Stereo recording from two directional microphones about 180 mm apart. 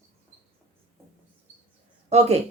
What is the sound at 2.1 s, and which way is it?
Speech, 35° right (ahead or behind).